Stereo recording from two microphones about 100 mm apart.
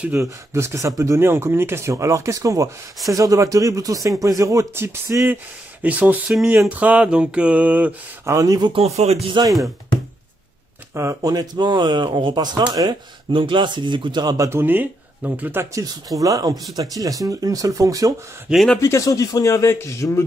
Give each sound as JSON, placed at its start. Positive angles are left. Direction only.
{"t": 0.1, "sound": "speech", "side_deg": -25}
{"t": 6.7, "sound": "mantra", "side_deg": -15}
{"t": 8.3, "sound": "speech", "side_deg": -30}
{"t": 8.7, "sound": "speech", "side_deg": -90}
{"t": 9.4, "sound": "speech", "side_deg": -50}
{"t": 11.0, "sound": "speech", "side_deg": -30}
{"t": 14.3, "sound": "speech", "side_deg": -30}
{"t": 16.2, "sound": "speech", "side_deg": -40}
{"t": 18.5, "sound": "speech", "side_deg": 0}
{"t": 18.8, "sound": "speech", "side_deg": 30}